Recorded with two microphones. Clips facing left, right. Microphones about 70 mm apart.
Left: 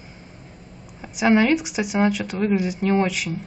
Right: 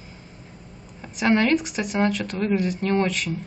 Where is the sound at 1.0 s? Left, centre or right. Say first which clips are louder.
Left 3 dB; centre.